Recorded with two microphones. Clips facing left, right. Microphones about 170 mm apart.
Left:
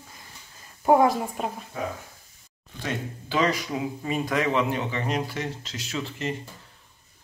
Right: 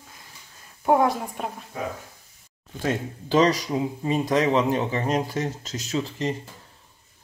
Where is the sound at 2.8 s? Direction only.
35° right (ahead or behind).